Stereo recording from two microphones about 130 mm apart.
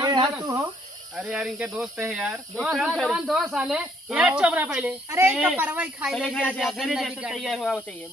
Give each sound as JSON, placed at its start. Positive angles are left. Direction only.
{"t": 0.0, "sound": "snake", "side_deg": -35}
{"t": 1.1, "sound": "speech", "side_deg": 0}
{"t": 6.1, "sound": "speech", "side_deg": 5}